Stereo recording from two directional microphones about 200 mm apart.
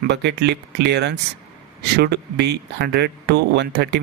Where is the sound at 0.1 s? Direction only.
55° right (ahead or behind).